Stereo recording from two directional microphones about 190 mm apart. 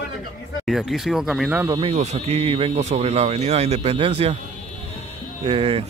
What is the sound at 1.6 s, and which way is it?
Speech, 20° right (ahead or behind).